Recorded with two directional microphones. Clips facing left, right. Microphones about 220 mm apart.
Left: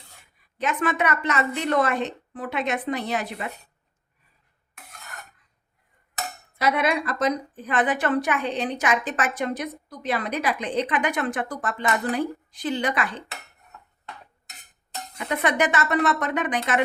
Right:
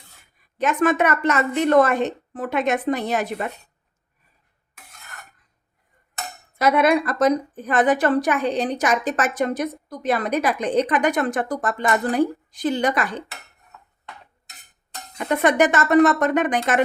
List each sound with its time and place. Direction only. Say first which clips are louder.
0.6 s a woman's voice: right 5 dB; 45° right (ahead or behind)
6.6 s a woman's voice: right 6 dB; 45° right (ahead or behind)
15.2 s a woman's voice: right 6 dB; 45° right (ahead or behind)